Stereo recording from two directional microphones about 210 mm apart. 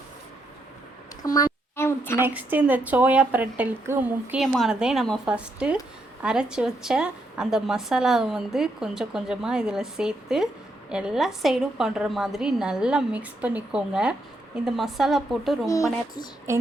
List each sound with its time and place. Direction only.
1.2 s a sound: 15° left (ahead or behind)
2.2 s a woman's voice: 5° right (ahead or behind)
15.6 s speech: 15° left (ahead or behind)
16.5 s speech: 15° right (ahead or behind)